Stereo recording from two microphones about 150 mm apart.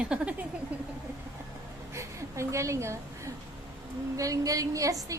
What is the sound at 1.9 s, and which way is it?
A woman's voice, 20° right (ahead or behind).